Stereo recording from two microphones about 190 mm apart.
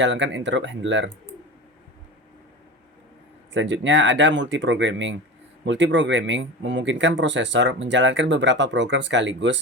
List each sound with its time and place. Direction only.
0.0 s speech: 75° right (ahead or behind)
3.5 s speech: 75° right (ahead or behind)